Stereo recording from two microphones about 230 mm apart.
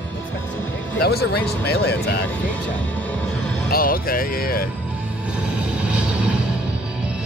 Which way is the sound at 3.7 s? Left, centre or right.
Left.